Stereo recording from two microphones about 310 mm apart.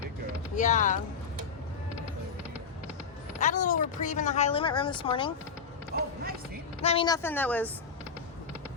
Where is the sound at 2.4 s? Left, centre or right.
Centre.